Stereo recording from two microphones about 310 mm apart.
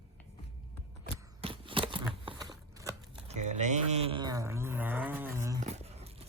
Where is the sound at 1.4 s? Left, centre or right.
Centre.